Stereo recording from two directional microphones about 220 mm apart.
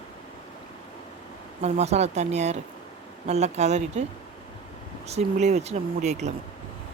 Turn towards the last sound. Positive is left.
turn(degrees=-30)  # may be behind; listen again after turning